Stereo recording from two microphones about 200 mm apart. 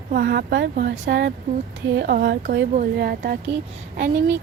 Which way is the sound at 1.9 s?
50° right (ahead or behind).